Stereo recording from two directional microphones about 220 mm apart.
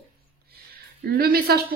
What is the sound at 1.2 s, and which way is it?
Speech, 45° right (ahead or behind).